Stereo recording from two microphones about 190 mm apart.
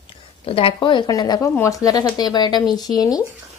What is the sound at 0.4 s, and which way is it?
Speech, 30° left (ahead or behind).